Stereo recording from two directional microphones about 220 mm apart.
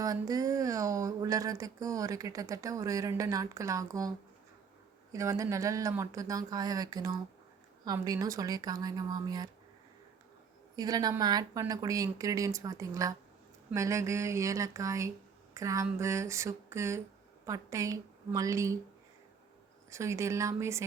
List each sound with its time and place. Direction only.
0.0 s speech: 15° right (ahead or behind)
5.1 s speech: 15° right (ahead or behind)
10.8 s a woman's voice: 15° right (ahead or behind)
19.9 s speech: 15° right (ahead or behind)